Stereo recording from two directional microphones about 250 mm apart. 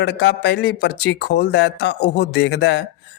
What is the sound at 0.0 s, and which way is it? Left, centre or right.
Speech, left.